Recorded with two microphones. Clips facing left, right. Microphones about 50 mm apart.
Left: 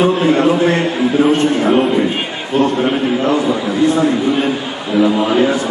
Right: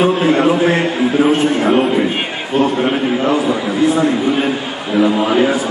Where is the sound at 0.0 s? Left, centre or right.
Centre.